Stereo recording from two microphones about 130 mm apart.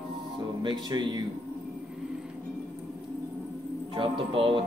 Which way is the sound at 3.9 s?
40° right (ahead or behind).